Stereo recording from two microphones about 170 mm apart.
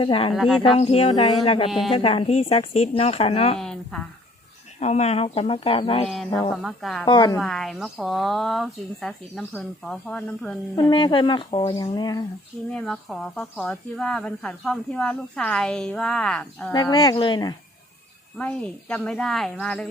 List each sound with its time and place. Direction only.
0.0 s speech: 30° left (ahead or behind)
0.3 s speech: centre (ahead or behind)
0.6 s speech: 35° left (ahead or behind)
3.6 s speech: 5° left (ahead or behind)
4.8 s speech: 40° left (ahead or behind)
6.6 s speech: centre (ahead or behind)
7.0 s a woman's voice: 25° left (ahead or behind)
7.3 s speech: centre (ahead or behind)
10.8 s a woman's voice: 25° left (ahead or behind)
12.7 s speech: 5° left (ahead or behind)
16.7 s a woman's voice: 25° left (ahead or behind)
18.3 s speech: 5° left (ahead or behind)